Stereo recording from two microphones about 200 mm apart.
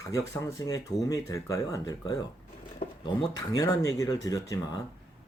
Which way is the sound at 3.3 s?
20° left (ahead or behind).